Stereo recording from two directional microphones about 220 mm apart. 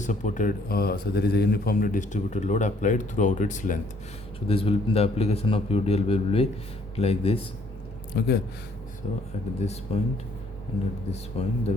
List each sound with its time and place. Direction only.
0.0 s a man's voice: 35° left (ahead or behind)
8.1 s speech: 45° left (ahead or behind)
9.0 s a man's voice: 35° left (ahead or behind)
11.1 s a man's voice: 30° left (ahead or behind)